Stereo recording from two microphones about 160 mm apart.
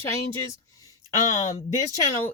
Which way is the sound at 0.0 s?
20° left (ahead or behind).